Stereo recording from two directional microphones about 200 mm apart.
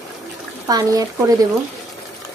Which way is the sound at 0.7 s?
20° right (ahead or behind).